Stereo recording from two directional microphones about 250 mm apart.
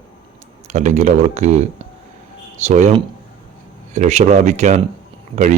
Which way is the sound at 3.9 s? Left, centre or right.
Right.